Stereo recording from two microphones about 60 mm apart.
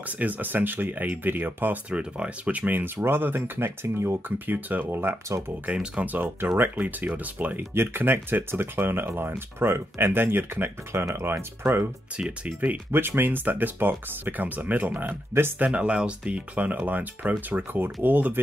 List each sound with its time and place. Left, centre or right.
0.2 s speech: right
1.9 s speech: centre; by 4.2 s right
4.5 s speech: right
6.1 s speech: right
7.7 s speech: right
15.6 s speech: centre